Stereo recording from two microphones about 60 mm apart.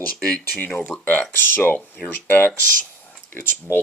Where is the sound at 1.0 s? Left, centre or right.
Left.